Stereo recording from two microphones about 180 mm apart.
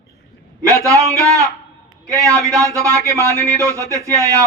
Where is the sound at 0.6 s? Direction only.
15° right (ahead or behind).